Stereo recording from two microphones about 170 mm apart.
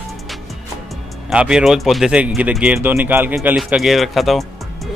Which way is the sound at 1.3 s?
5° right (ahead or behind).